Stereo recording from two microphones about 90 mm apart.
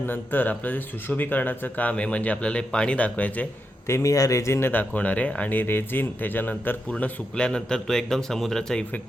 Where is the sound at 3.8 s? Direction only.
30° left (ahead or behind); by 8.8 s 5° left (ahead or behind).